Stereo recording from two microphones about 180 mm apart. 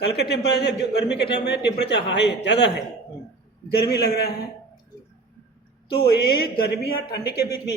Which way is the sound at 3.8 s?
65° left (ahead or behind).